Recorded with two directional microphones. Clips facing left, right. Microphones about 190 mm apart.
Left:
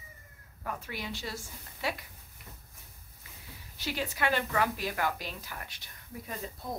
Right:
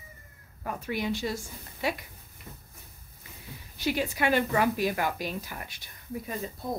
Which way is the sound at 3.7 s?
15° right (ahead or behind).